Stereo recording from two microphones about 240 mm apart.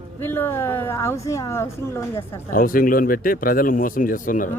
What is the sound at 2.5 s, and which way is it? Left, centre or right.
Speech, left.